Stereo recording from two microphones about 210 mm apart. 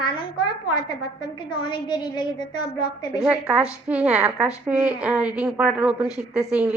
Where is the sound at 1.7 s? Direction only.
20° left (ahead or behind).